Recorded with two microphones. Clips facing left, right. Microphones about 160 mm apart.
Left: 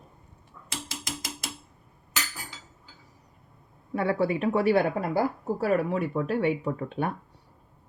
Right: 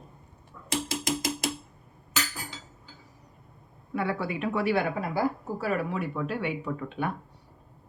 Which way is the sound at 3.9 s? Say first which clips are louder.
Left 4 dB; 40° left (ahead or behind).